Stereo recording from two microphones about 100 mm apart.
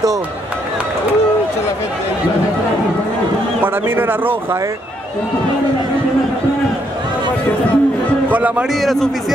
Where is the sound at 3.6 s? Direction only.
20° right (ahead or behind).